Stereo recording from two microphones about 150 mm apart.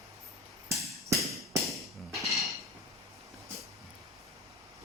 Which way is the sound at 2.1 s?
Centre (ahead or behind).